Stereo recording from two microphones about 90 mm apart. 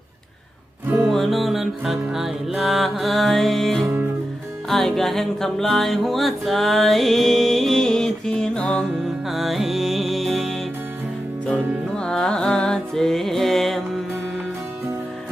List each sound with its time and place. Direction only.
1.1 s music: centre (ahead or behind)
9.2 s music: centre (ahead or behind)
11.5 s music: 15° right (ahead or behind)
11.9 s music: 10° left (ahead or behind)